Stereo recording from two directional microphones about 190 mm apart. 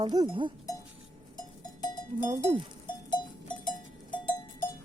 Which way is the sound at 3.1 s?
25° left (ahead or behind).